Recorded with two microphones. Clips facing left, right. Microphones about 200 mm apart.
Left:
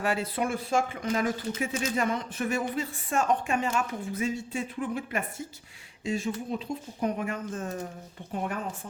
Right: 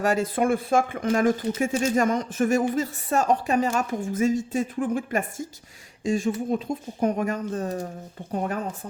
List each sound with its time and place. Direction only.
0.0 s speech: 45° right (ahead or behind)